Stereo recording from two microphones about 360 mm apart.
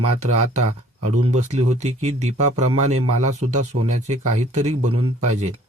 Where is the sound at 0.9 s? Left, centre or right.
Centre.